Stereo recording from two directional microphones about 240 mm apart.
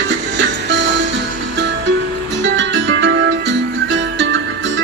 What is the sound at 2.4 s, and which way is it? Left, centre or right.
Music, right.